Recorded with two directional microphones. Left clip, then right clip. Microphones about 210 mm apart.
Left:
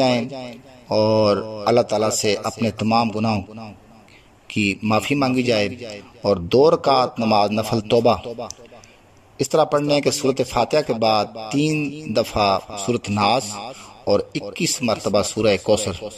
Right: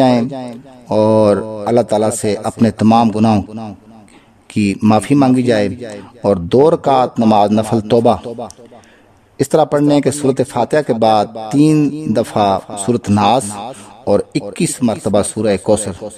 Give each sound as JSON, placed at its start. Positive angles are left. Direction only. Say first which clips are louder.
{"t": 0.0, "sound": "speech", "louder": "right 6 dB", "side_deg": -25}